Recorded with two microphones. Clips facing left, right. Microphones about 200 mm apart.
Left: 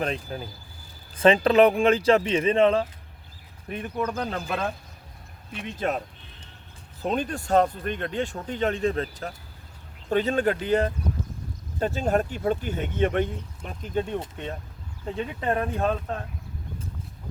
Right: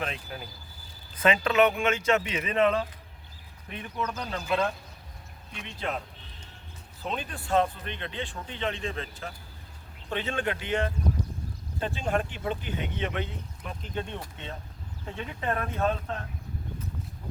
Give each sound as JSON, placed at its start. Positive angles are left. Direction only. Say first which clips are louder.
{"t": 0.0, "sound": "speech", "louder": "left 6 dB", "side_deg": 40}
{"t": 3.7, "sound": "speech", "louder": "left 5 dB", "side_deg": 45}
{"t": 5.7, "sound": "speech", "louder": "left 6 dB", "side_deg": 45}
{"t": 7.0, "sound": "speech", "louder": "left 8 dB", "side_deg": 45}
{"t": 15.1, "sound": "speech", "louder": "left 5 dB", "side_deg": 35}